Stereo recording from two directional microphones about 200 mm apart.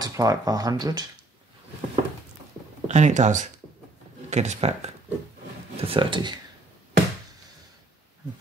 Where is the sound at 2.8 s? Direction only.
35° right (ahead or behind).